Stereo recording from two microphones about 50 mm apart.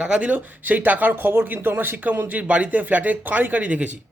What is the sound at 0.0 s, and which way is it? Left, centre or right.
A man's voice, right.